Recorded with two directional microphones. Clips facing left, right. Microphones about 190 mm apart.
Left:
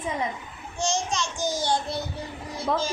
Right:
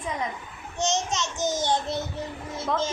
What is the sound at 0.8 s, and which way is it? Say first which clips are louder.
A child's voice: even; 20° right (ahead or behind).